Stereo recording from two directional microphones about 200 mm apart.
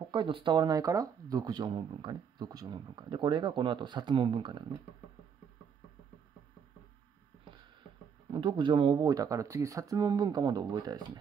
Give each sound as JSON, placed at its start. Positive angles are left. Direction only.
{"t": 0.1, "sound": "speech", "side_deg": -25}
{"t": 8.3, "sound": "speech", "side_deg": -20}